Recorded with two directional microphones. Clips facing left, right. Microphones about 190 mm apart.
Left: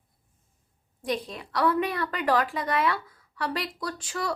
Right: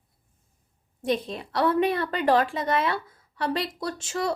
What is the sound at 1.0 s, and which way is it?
A woman's voice, 25° right (ahead or behind).